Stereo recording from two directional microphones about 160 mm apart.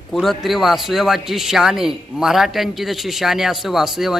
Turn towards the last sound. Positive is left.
turn(degrees=0)  # may be behind; listen again after turning